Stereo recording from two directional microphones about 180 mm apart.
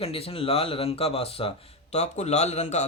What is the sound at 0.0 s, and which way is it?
Speech, 35° left (ahead or behind).